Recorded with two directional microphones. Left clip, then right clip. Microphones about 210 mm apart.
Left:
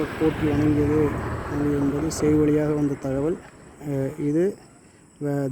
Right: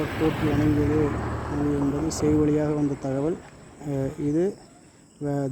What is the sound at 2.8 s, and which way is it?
Speech, 40° left (ahead or behind).